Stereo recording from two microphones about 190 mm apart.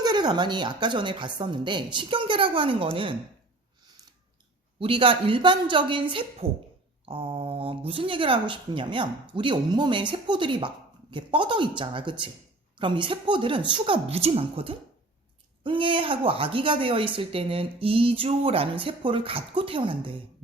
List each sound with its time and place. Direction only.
0.0 s speech: 20° right (ahead or behind)
4.8 s speech: 25° right (ahead or behind)